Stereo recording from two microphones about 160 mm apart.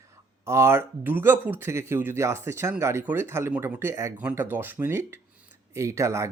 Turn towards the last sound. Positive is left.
turn(degrees=-20)  # may be behind; listen again after turning